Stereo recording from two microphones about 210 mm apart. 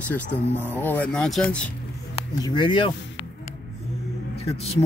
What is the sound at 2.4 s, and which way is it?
Speech, 20° left (ahead or behind).